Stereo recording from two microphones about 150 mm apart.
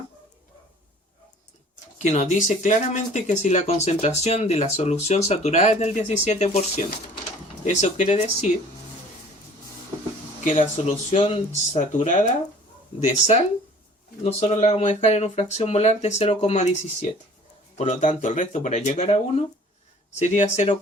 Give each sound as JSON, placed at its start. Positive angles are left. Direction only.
{"t": 2.0, "sound": "speech", "side_deg": 50}
{"t": 10.4, "sound": "speech", "side_deg": 55}
{"t": 14.3, "sound": "speech", "side_deg": 45}